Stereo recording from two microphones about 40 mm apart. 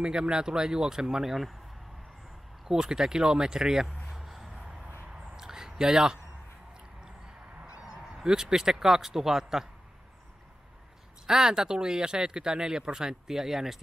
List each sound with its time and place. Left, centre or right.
0.0 s speech: centre
2.7 s speech: centre
4.1 s a sound: centre
7.6 s honk: centre
8.1 s speech: centre
11.2 s speech: centre